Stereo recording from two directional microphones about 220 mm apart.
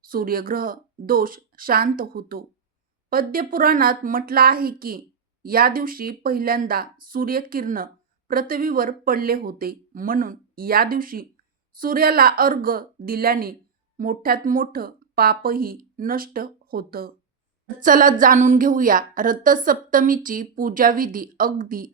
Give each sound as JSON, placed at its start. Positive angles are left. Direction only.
{"t": 0.1, "sound": "speech", "side_deg": -40}